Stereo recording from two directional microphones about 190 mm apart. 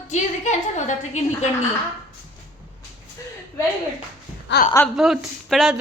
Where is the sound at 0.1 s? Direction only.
40° left (ahead or behind).